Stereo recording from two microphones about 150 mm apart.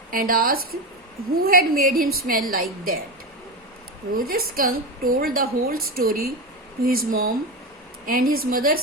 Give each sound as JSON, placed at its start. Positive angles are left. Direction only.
{"t": 0.1, "sound": "a woman's voice", "side_deg": -70}
{"t": 4.1, "sound": "a woman's voice", "side_deg": -75}